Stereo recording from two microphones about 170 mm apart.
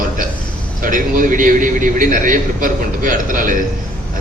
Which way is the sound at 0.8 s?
55° right (ahead or behind).